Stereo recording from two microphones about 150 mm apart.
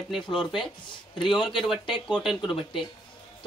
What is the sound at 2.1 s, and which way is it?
Speech, centre (ahead or behind).